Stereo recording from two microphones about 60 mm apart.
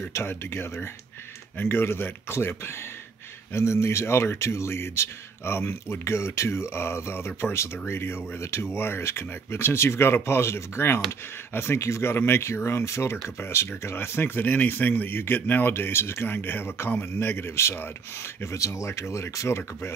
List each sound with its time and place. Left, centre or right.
0.1 s speech: left
13.7 s speech: left